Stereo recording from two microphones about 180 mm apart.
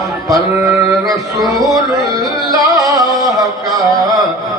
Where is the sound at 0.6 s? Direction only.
15° right (ahead or behind).